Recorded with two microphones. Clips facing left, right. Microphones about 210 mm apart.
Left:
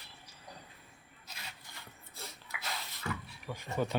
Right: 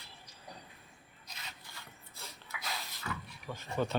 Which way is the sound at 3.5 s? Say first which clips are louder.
Even; 15° left (ahead or behind).